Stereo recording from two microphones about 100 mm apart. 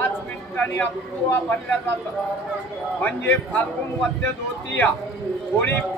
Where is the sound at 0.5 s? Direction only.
20° left (ahead or behind).